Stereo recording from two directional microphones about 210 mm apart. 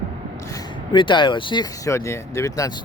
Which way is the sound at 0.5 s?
20° left (ahead or behind).